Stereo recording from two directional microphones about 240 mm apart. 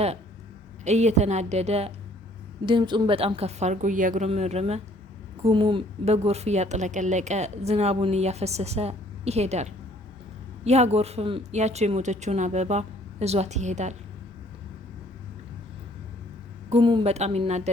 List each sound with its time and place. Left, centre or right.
0.9 s a woman's voice: right
16.6 s a woman's voice: right